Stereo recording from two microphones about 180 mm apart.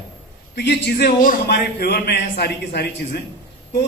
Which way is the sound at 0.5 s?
65° left (ahead or behind).